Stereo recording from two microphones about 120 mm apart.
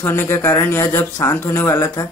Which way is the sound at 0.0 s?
20° left (ahead or behind).